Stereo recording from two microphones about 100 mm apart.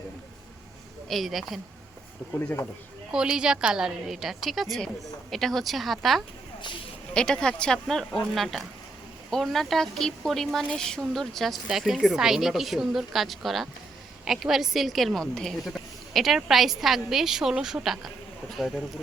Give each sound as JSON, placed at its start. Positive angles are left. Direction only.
{"t": 1.0, "sound": "a woman's voice", "side_deg": 0}
{"t": 2.3, "sound": "speech", "side_deg": 20}
{"t": 3.1, "sound": "a woman's voice", "side_deg": -10}